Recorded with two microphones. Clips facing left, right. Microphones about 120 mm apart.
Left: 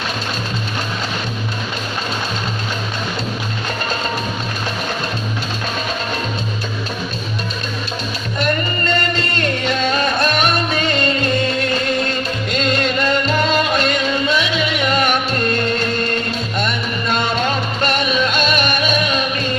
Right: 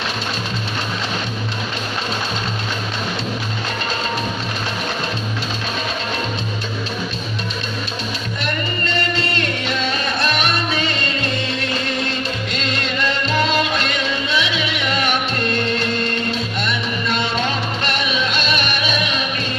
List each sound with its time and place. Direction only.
8.9 s music: 45° left (ahead or behind)
12.5 s music: 45° left (ahead or behind)
16.6 s music: 45° left (ahead or behind)